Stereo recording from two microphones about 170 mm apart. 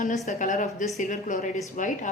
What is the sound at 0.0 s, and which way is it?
A woman's voice, 45° left (ahead or behind).